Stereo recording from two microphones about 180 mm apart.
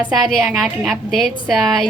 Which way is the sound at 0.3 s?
Centre (ahead or behind).